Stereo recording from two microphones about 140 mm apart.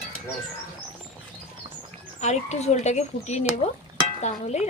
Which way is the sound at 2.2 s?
55° left (ahead or behind).